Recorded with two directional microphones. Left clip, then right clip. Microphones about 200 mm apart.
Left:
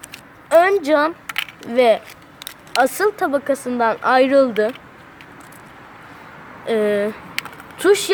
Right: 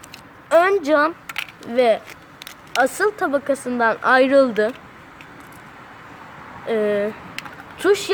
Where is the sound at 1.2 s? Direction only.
20° left (ahead or behind).